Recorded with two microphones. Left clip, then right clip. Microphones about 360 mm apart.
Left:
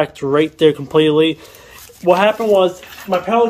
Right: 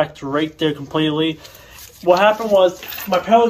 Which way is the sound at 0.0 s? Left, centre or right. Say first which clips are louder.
Left 4 dB; left.